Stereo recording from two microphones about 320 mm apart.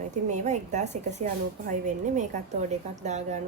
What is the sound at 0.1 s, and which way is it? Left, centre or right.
A woman's voice, right.